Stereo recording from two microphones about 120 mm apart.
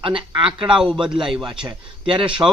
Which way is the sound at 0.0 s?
45° right (ahead or behind).